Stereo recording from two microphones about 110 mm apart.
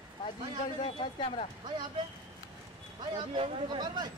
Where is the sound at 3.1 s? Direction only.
50° right (ahead or behind).